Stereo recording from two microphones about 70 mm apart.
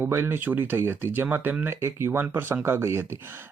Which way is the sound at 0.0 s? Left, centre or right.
Right.